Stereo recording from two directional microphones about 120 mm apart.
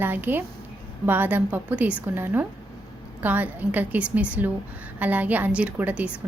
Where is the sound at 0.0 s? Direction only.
15° right (ahead or behind).